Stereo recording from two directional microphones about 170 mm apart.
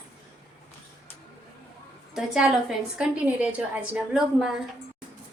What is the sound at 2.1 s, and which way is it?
A woman's voice, 5° right (ahead or behind).